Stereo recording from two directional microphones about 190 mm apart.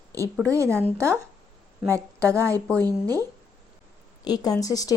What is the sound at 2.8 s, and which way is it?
Speech, 20° right (ahead or behind).